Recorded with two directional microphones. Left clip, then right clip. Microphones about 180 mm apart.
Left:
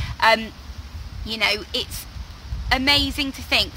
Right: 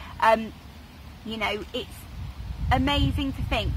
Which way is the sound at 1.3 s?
10° left (ahead or behind).